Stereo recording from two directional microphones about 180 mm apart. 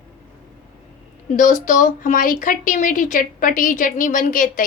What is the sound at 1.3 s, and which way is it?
Speech, 45° left (ahead or behind).